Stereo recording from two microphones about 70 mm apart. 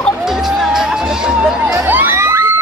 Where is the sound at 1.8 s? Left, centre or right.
Right.